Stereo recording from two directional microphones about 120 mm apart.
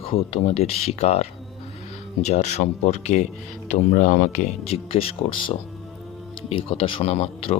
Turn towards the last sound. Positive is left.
turn(degrees=55)  # may be behind; listen again after turning